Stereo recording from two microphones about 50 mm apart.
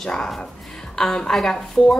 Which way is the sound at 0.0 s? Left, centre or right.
Centre.